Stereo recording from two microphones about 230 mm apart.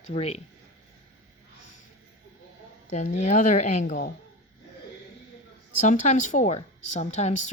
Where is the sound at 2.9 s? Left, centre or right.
Left.